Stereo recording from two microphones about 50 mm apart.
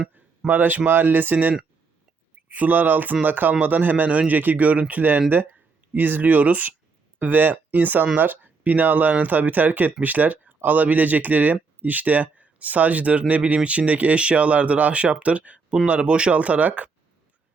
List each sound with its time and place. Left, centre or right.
0.4 s speech: right